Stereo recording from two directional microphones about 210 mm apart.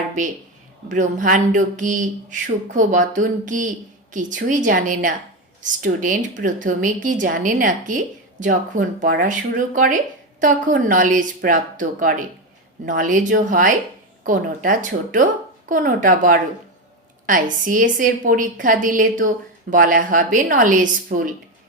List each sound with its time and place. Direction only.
0.9 s a woman's voice: 40° right (ahead or behind)